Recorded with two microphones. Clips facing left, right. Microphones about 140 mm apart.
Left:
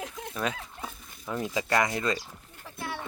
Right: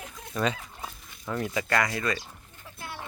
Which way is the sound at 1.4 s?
20° left (ahead or behind).